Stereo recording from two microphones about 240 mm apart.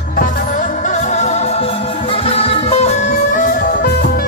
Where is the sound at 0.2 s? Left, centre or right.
Left.